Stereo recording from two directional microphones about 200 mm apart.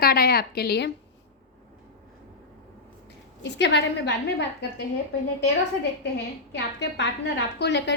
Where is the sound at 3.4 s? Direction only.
60° left (ahead or behind).